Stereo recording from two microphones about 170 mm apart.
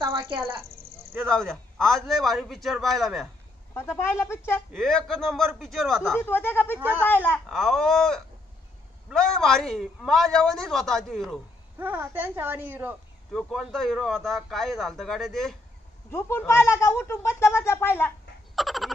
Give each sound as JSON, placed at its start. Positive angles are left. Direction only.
{"t": 0.0, "sound": "a sound", "side_deg": -25}
{"t": 1.2, "sound": "a man's voice", "side_deg": 0}
{"t": 3.7, "sound": "speech", "side_deg": 15}
{"t": 4.7, "sound": "a man's voice", "side_deg": 0}
{"t": 6.1, "sound": "speech", "side_deg": 10}
{"t": 6.8, "sound": "a woman's voice", "side_deg": -10}
{"t": 7.1, "sound": "a man's voice", "side_deg": 10}
{"t": 11.8, "sound": "a woman's voice", "side_deg": -10}
{"t": 13.3, "sound": "a man's voice", "side_deg": 0}
{"t": 16.1, "sound": "speech", "side_deg": 15}
{"t": 18.5, "sound": "frog", "side_deg": 0}